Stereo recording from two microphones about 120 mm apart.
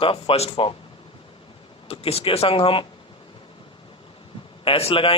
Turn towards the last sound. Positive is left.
turn(degrees=50)  # may be behind; listen again after turning